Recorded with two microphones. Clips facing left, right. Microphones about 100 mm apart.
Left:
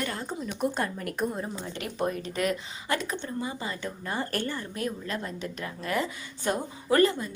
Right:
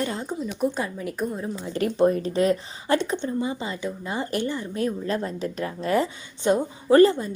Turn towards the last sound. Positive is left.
turn(degrees=-35)  # may be behind; listen again after turning